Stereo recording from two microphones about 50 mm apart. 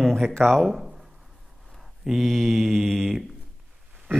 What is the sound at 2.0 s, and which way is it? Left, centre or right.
Speech, centre.